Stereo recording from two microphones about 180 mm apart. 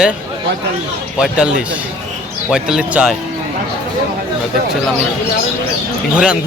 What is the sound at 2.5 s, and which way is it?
Speech, 5° right (ahead or behind).